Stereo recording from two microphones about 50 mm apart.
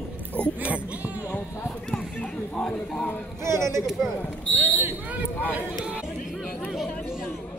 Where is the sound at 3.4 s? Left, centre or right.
Right.